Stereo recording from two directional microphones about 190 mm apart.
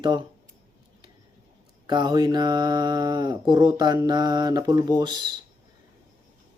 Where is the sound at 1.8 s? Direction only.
25° right (ahead or behind).